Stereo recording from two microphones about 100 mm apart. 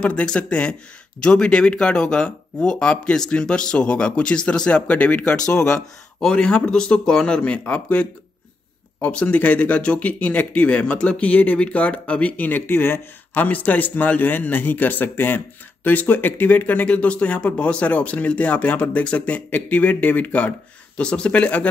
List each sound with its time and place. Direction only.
0.0 s a man's voice: 10° left (ahead or behind)